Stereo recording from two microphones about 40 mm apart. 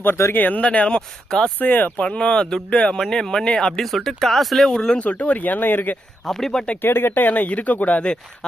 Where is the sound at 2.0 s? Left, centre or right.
Left.